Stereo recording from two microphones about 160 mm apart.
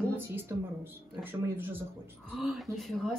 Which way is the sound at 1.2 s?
15° right (ahead or behind).